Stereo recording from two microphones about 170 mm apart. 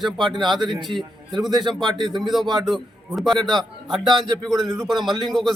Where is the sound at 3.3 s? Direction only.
25° right (ahead or behind).